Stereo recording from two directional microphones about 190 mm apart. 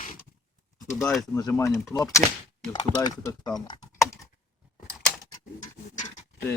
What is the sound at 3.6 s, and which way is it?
Typing, 20° left (ahead or behind).